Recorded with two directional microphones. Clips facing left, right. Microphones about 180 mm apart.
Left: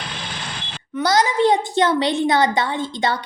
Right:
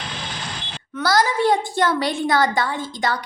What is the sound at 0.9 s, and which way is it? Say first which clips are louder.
A child's voice: left 2 dB; 20° left (ahead or behind).